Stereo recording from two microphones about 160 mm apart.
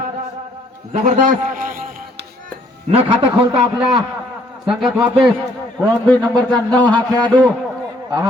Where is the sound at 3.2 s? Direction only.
30° right (ahead or behind).